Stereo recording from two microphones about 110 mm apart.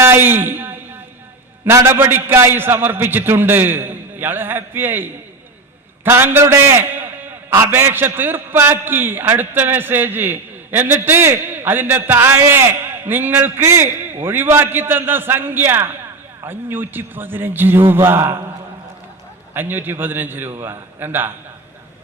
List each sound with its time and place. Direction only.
0.0 s a man's voice: 20° right (ahead or behind)
19.5 s a man's voice: 20° right (ahead or behind)